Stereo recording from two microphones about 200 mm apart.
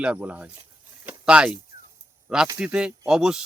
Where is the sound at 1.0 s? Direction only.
5° right (ahead or behind).